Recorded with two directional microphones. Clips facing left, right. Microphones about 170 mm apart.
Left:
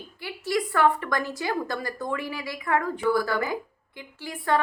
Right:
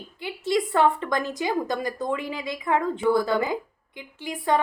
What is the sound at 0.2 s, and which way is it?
A woman's voice, 20° right (ahead or behind).